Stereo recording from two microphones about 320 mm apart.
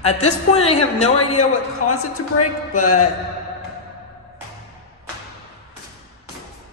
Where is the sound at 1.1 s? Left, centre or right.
Left.